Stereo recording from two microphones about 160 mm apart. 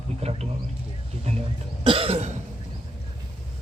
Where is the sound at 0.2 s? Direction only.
40° right (ahead or behind).